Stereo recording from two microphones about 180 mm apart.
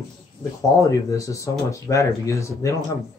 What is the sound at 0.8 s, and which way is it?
Speech, 20° left (ahead or behind).